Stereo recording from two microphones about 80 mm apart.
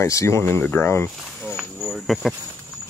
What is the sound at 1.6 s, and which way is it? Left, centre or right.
Cricket, centre.